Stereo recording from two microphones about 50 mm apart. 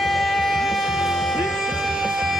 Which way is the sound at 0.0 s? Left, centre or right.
Centre.